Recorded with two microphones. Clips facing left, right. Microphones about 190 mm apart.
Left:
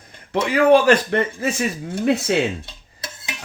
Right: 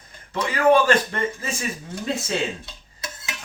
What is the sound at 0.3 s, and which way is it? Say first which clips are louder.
Speech: left 4 dB; 70° left (ahead or behind).